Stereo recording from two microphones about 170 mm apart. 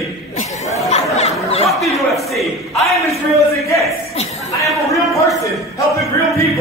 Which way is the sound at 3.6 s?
20° left (ahead or behind).